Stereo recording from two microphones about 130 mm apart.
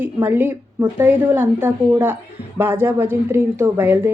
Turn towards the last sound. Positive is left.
turn(degrees=-15)  # may be behind; listen again after turning